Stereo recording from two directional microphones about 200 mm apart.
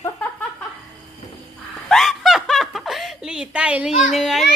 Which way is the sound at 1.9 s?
Centre (ahead or behind).